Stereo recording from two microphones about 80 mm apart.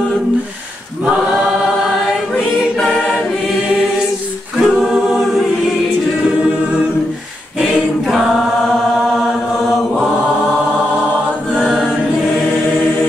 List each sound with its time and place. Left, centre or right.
4.6 s a capella: centre
11.5 s a capella: centre